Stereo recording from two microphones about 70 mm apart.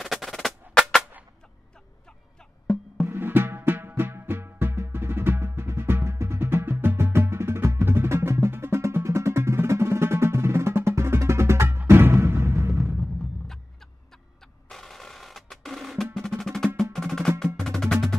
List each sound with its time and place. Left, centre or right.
0.0 s music: centre
2.6 s music: centre
3.1 s music: right
14.7 s percussion: centre
17.6 s music: centre